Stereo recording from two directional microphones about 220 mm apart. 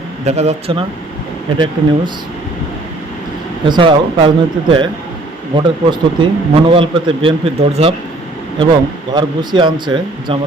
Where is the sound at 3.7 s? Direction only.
25° right (ahead or behind).